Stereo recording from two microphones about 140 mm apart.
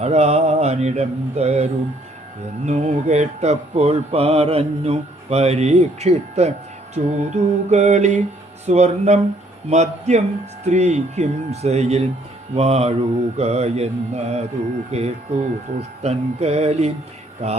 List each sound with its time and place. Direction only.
0.0 s music: 50° right (ahead or behind)